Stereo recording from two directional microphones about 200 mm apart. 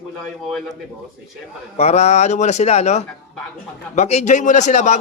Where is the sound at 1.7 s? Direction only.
30° left (ahead or behind).